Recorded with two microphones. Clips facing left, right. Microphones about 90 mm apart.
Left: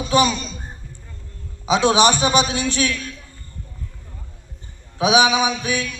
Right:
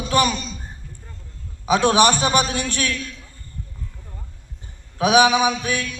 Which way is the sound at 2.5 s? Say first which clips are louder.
Left 3 dB; 20° left (ahead or behind).